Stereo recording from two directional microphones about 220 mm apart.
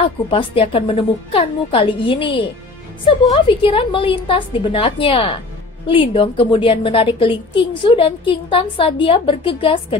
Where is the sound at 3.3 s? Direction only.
25° left (ahead or behind).